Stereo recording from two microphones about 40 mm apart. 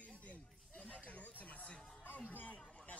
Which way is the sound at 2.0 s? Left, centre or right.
Left.